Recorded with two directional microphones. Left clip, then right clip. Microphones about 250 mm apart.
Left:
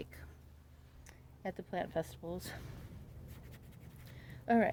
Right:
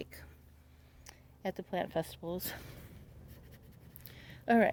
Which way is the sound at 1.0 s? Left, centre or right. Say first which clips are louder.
Right 4 dB; right.